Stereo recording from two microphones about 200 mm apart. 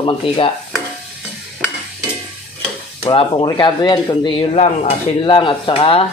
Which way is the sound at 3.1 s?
25° left (ahead or behind).